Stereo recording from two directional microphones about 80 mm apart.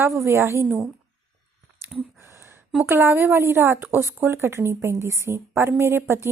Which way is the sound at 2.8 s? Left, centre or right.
Right.